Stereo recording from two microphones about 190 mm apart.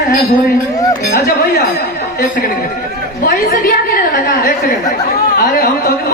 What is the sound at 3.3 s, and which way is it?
A woman's voice, 50° left (ahead or behind).